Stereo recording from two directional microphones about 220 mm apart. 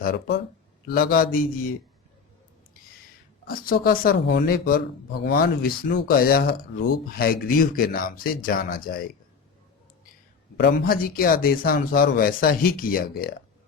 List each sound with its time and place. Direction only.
0.0 s speech: 45° left (ahead or behind)
3.4 s speech: 40° left (ahead or behind)
10.6 s speech: 45° left (ahead or behind)